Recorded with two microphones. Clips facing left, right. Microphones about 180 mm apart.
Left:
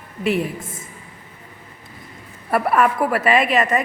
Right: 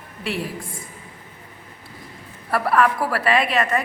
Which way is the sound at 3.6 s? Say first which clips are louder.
Left 2 dB; 20° left (ahead or behind).